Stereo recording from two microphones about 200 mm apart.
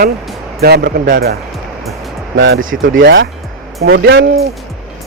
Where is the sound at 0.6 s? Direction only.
50° right (ahead or behind).